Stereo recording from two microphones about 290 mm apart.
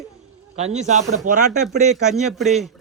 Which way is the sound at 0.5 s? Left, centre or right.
Right.